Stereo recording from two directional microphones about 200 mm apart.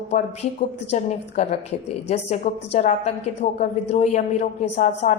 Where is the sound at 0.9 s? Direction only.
35° left (ahead or behind).